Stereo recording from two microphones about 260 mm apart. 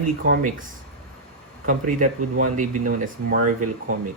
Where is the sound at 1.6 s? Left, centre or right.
Right.